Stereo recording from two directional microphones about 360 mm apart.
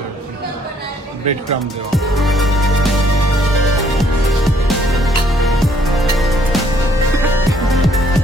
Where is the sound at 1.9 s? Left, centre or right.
Centre.